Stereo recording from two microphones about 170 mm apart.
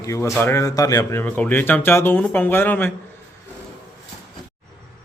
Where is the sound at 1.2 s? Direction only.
10° left (ahead or behind).